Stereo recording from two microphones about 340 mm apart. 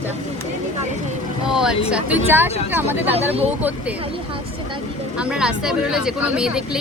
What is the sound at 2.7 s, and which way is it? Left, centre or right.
Speech, centre.